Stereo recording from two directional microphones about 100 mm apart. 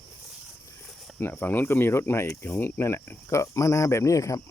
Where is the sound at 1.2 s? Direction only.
20° left (ahead or behind).